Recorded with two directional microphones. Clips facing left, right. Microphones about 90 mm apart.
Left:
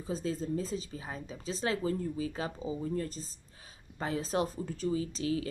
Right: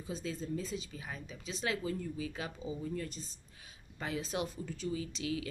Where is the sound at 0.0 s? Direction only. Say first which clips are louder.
Left 5 dB; 35° left (ahead or behind).